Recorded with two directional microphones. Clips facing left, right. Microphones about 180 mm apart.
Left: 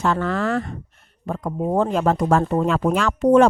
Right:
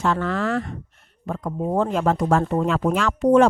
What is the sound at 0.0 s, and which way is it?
Speech, 40° left (ahead or behind).